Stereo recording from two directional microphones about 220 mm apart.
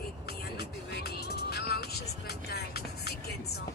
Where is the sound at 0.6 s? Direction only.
45° left (ahead or behind).